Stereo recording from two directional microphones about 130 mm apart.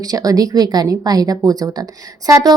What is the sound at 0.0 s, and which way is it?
A woman's voice, 30° right (ahead or behind).